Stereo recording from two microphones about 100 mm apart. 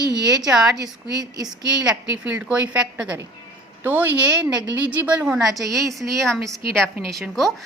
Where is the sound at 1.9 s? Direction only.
10° right (ahead or behind).